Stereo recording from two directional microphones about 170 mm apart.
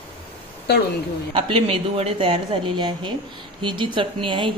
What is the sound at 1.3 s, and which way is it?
Speech, 30° right (ahead or behind).